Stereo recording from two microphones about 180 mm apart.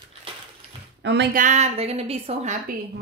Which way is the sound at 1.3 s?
45° right (ahead or behind).